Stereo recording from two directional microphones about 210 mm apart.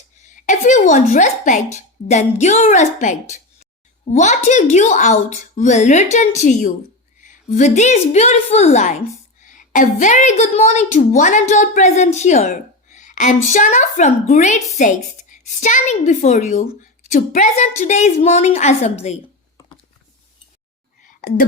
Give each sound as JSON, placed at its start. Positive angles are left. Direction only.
{"t": 0.2, "sound": "a woman's voice", "side_deg": 35}
{"t": 7.2, "sound": "a sound", "side_deg": 35}
{"t": 7.8, "sound": "a woman's voice", "side_deg": 35}
{"t": 21.1, "sound": "whispering", "side_deg": 40}